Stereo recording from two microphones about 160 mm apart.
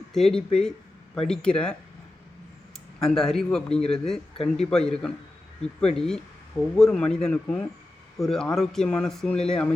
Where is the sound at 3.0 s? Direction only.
5° left (ahead or behind).